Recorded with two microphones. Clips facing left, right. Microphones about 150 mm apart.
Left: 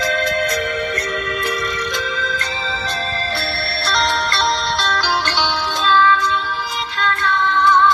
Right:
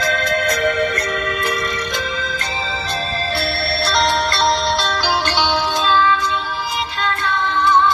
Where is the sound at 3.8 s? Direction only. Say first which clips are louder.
Right 2 dB; 10° right (ahead or behind).